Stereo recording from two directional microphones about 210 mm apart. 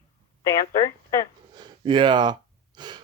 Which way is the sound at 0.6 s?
40° left (ahead or behind).